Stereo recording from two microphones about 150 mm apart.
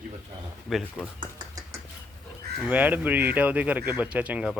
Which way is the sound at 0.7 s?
Centre (ahead or behind).